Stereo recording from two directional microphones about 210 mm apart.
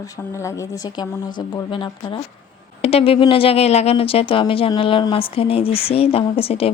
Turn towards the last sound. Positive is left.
turn(degrees=30)  # may be behind; listen again after turning